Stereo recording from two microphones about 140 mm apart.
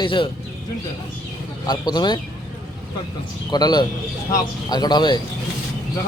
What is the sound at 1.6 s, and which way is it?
Speech, 30° left (ahead or behind).